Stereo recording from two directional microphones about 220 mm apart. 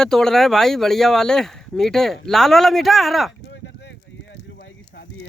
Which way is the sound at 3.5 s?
55° left (ahead or behind).